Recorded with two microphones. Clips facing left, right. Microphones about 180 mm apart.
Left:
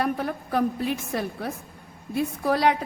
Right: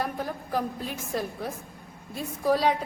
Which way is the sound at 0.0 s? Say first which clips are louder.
Left 5 dB; 65° left (ahead or behind).